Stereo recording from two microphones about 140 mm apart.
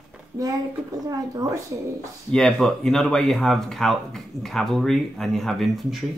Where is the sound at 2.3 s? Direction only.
5° left (ahead or behind).